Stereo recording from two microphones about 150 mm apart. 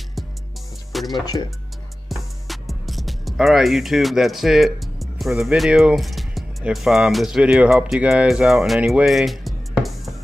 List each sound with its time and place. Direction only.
0.9 s speech: centre (ahead or behind)
1.2 s speech: 25° left (ahead or behind)
2.0 s speech: centre (ahead or behind)